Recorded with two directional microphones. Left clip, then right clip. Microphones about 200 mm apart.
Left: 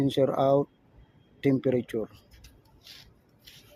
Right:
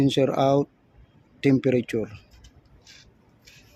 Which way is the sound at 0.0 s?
25° right (ahead or behind).